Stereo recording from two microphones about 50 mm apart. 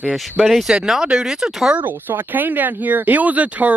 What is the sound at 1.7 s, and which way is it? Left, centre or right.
Speech, right.